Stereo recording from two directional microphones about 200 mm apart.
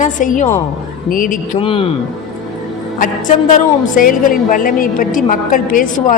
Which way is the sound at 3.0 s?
40° left (ahead or behind).